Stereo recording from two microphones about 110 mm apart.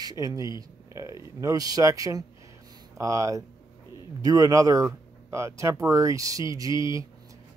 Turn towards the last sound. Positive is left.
turn(degrees=-30)  # may be behind; listen again after turning